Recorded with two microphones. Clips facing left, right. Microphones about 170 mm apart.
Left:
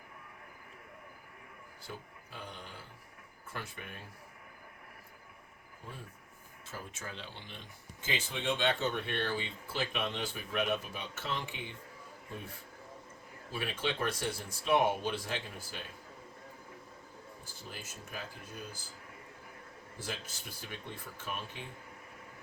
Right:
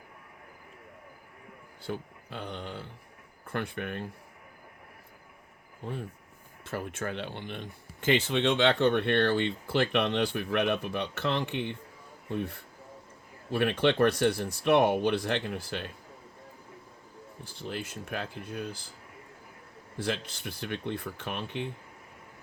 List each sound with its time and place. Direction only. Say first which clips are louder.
1.9 s speech: right 10 dB; 70° right (ahead or behind)
5.8 s speech: right 11 dB; 70° right (ahead or behind)
13.5 s speech: right 11 dB; 65° right (ahead or behind)
18.1 s speech: right 8 dB; 70° right (ahead or behind)
20.1 s speech: right 10 dB; 65° right (ahead or behind)